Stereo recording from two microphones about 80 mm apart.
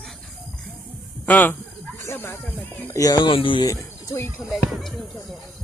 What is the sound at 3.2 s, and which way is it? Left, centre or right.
Speech, left.